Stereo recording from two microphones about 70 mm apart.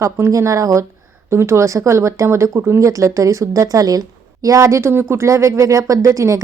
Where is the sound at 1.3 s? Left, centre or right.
Right.